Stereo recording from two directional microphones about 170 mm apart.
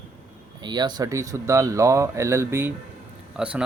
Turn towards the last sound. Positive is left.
turn(degrees=-5)  # may be behind; listen again after turning